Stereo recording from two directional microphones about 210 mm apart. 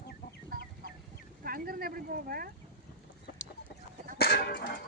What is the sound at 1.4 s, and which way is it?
Speech, 45° right (ahead or behind).